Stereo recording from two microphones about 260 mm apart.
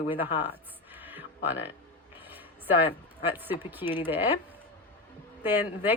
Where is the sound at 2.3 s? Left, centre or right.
Centre.